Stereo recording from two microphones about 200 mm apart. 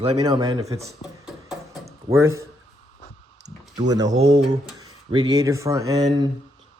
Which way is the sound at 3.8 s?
20° right (ahead or behind).